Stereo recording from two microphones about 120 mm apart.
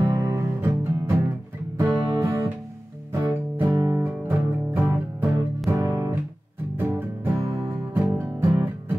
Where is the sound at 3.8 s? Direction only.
20° right (ahead or behind).